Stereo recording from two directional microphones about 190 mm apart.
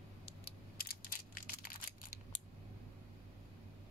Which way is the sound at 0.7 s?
50° left (ahead or behind).